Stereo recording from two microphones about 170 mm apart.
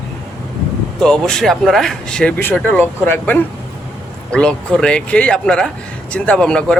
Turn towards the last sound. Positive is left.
turn(degrees=5)  # may be behind; listen again after turning